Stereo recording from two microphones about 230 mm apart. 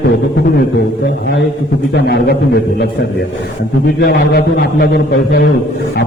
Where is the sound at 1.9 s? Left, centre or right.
Left.